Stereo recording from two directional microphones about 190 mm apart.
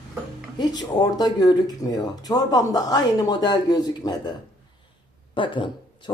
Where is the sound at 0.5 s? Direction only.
20° left (ahead or behind).